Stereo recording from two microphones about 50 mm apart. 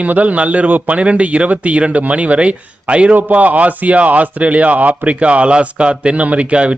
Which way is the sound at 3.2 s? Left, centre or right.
Right.